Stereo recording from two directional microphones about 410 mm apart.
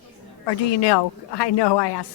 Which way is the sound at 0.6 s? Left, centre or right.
Left.